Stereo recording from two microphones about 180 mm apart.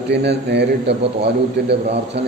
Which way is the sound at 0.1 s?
70° right (ahead or behind).